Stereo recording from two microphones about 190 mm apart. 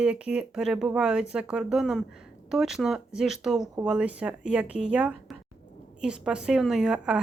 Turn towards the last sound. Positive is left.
turn(degrees=-5)  # may be behind; listen again after turning